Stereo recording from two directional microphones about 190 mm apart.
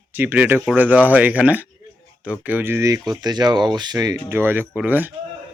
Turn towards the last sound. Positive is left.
turn(degrees=-10)  # may be behind; listen again after turning